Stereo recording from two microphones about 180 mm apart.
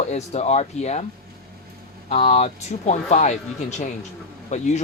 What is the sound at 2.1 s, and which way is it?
Speech, 35° left (ahead or behind).